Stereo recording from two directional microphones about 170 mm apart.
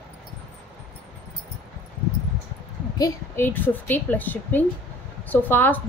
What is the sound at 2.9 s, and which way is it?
Speech, 20° left (ahead or behind).